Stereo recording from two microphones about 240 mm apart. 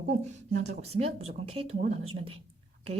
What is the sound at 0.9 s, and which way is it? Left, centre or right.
A woman's voice, right.